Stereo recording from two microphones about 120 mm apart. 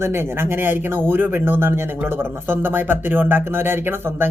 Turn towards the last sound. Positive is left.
turn(degrees=-20)  # may be behind; listen again after turning